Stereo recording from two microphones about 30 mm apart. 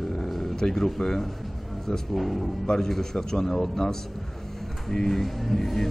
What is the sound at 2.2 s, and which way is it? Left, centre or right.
Speech, centre.